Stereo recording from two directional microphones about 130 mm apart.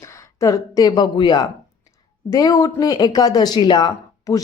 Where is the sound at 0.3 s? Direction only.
25° left (ahead or behind).